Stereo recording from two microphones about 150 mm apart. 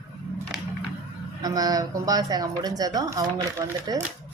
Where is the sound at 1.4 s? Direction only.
25° right (ahead or behind).